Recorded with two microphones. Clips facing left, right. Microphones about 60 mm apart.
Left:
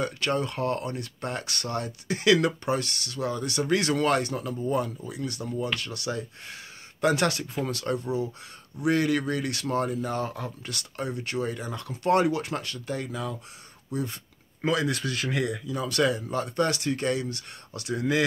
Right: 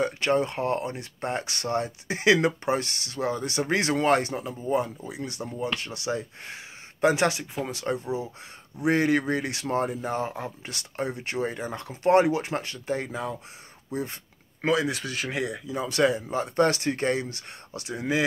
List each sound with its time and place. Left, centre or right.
0.0 s speech: right
14.7 s speech: centre
16.5 s speech: right